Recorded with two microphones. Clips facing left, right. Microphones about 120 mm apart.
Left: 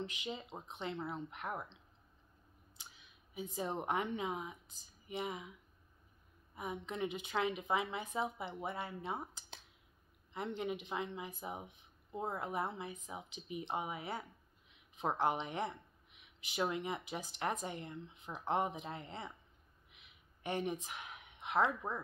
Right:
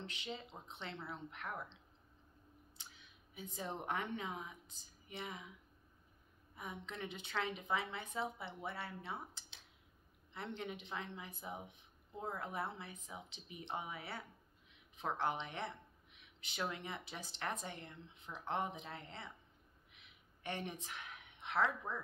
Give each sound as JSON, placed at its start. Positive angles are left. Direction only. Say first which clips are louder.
{"t": 0.0, "sound": "speech", "louder": "left 4 dB", "side_deg": 15}
{"t": 3.3, "sound": "speech", "louder": "left 5 dB", "side_deg": 15}
{"t": 6.5, "sound": "speech", "louder": "left 6 dB", "side_deg": 15}
{"t": 10.3, "sound": "speech", "louder": "left 6 dB", "side_deg": 15}
{"t": 20.4, "sound": "speech", "louder": "left 6 dB", "side_deg": 15}